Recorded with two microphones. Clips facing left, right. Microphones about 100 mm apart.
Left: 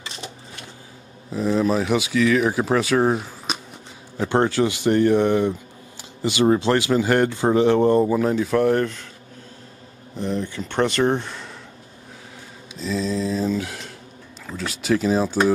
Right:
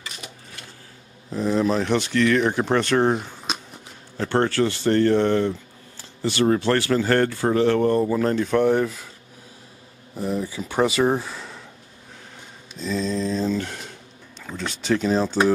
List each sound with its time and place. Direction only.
0.0 s cash register: 25° left (ahead or behind)
1.3 s speech: centre (ahead or behind)
4.3 s speech: 15° left (ahead or behind)
8.2 s speech: 5° left (ahead or behind)
10.1 s speech: 5° right (ahead or behind)
12.7 s mantra: centre (ahead or behind)
14.4 s speech: centre (ahead or behind)